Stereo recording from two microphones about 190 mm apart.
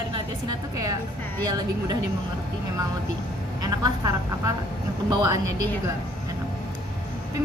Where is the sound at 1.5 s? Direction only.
20° right (ahead or behind).